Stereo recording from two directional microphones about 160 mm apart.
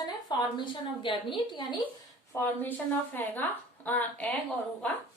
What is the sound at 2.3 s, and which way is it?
Speech, 10° left (ahead or behind).